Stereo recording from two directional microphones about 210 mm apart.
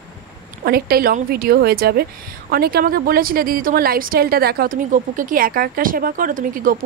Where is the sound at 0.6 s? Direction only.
45° right (ahead or behind).